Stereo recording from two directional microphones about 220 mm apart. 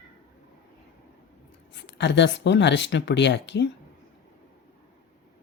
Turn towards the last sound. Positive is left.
turn(degrees=50)  # may be behind; listen again after turning